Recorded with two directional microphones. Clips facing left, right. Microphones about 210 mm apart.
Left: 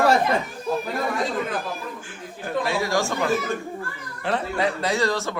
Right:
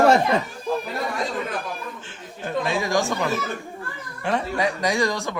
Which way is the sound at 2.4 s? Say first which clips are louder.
Even; 15° right (ahead or behind).